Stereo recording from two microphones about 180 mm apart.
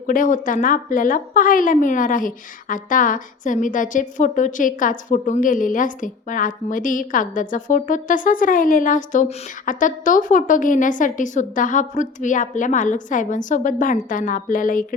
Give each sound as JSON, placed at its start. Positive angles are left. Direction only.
{"t": 0.1, "sound": "a woman's voice", "side_deg": 50}